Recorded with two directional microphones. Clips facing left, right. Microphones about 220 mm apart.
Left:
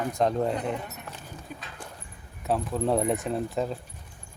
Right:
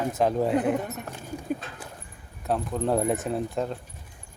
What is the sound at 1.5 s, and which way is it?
Clip-clop, 50° right (ahead or behind).